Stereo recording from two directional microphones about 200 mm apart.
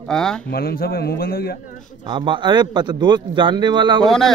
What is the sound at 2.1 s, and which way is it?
A man's voice, 25° right (ahead or behind).